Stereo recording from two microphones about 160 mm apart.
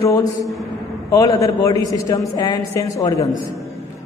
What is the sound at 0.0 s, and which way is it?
A man's voice, 20° left (ahead or behind).